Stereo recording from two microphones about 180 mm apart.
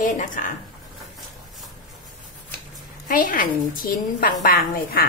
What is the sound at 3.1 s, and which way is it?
Speech, 50° left (ahead or behind).